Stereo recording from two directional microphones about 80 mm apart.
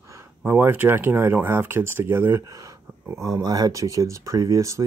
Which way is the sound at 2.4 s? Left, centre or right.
Right.